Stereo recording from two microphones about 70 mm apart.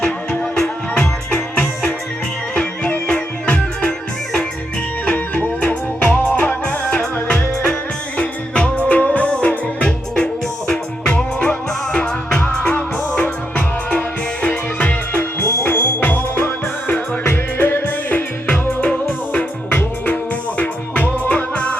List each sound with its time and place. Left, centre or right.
0.0 s music: centre
5.0 s music: left
7.3 s music: centre